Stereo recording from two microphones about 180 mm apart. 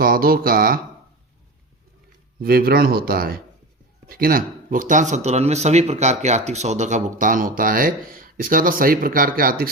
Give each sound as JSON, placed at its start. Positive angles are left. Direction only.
{"t": 0.0, "sound": "speech", "side_deg": -55}
{"t": 2.4, "sound": "speech", "side_deg": -60}